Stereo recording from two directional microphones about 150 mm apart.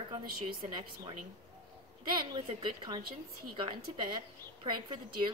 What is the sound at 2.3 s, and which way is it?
Speech, 30° right (ahead or behind).